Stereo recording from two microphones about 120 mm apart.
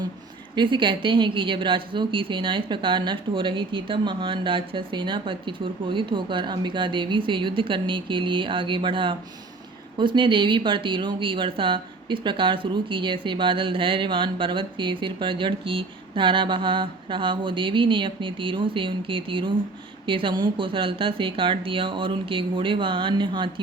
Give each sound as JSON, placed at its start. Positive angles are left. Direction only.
{"t": 0.5, "sound": "speech", "side_deg": -40}